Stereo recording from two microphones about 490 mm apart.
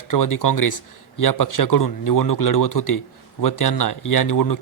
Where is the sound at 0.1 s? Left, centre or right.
Left.